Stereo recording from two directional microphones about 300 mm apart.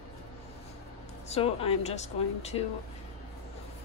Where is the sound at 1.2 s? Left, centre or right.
Centre.